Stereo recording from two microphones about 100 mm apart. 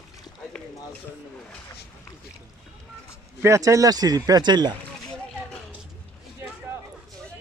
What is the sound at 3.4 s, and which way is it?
Speech, 30° right (ahead or behind).